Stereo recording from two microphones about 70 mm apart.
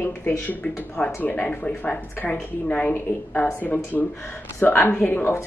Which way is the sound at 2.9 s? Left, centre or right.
Left.